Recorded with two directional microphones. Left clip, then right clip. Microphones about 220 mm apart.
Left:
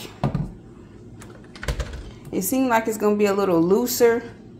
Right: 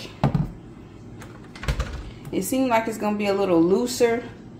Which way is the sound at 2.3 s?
35° left (ahead or behind).